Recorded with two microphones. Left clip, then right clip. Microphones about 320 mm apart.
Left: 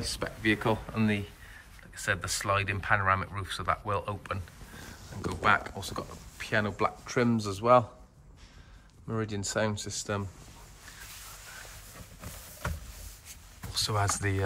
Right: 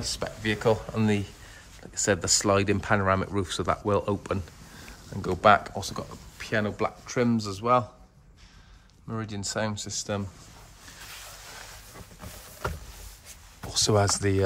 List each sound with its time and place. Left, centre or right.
0.2 s speech: centre
9.0 s speech: centre
13.7 s speech: centre